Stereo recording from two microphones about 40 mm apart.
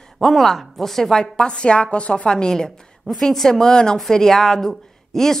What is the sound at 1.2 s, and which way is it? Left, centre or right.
A woman's voice, left.